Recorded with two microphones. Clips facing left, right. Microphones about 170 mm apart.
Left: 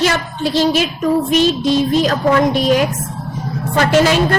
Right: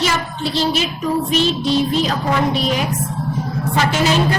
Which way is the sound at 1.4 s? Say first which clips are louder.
Left 3 dB; 45° left (ahead or behind).